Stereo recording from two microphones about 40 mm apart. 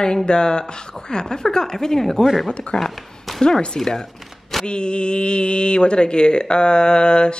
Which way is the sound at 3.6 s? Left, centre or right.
Centre.